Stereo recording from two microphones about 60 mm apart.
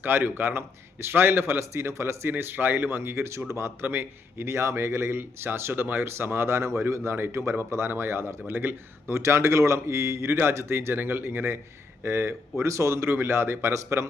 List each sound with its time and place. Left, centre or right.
0.0 s speech: right
2.3 s speech: right
3.8 s speech: right
4.4 s speech: right
9.1 s speech: right